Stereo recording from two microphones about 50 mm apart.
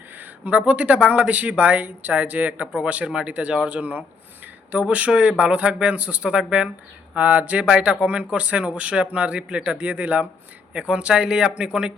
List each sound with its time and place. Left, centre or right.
0.5 s speech: right
10.8 s a man's voice: centre